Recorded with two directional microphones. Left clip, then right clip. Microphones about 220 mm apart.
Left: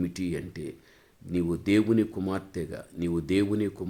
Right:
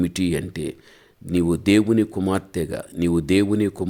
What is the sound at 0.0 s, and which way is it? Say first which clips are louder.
Speech: right 9 dB; 35° right (ahead or behind).